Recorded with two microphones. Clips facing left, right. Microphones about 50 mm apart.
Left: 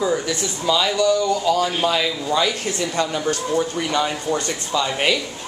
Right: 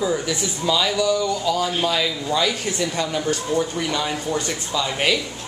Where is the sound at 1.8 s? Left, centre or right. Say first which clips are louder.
Left 1 dB; centre.